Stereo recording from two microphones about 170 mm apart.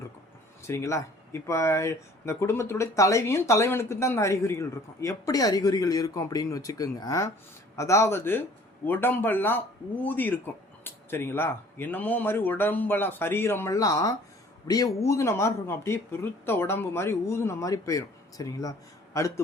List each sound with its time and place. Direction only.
0.7 s a man's voice: 15° left (ahead or behind)